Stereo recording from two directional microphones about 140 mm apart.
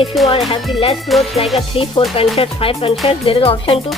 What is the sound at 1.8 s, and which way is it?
Speech, 45° left (ahead or behind).